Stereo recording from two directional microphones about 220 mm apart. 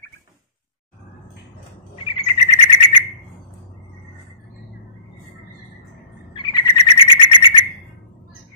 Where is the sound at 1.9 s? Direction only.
25° left (ahead or behind).